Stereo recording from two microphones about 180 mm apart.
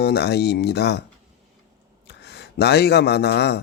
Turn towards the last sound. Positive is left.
turn(degrees=70)  # may be behind; listen again after turning